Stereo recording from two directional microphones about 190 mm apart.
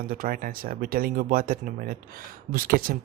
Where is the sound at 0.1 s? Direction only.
50° right (ahead or behind).